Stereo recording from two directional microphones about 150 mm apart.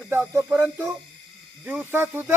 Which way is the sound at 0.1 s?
15° right (ahead or behind).